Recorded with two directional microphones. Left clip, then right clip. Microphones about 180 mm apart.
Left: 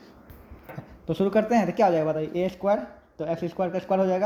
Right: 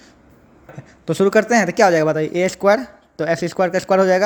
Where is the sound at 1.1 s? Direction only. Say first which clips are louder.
Right 8 dB; 40° right (ahead or behind).